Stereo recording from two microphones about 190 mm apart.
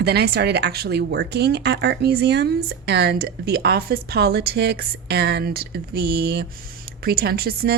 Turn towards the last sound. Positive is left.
turn(degrees=-55)  # may be behind; listen again after turning